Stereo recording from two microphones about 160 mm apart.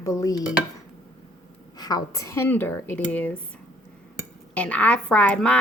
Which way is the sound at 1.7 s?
25° left (ahead or behind).